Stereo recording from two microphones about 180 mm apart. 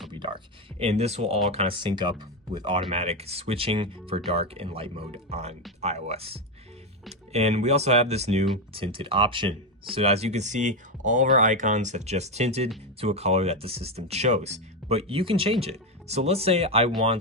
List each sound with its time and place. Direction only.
0.1 s speech: 25° right (ahead or behind)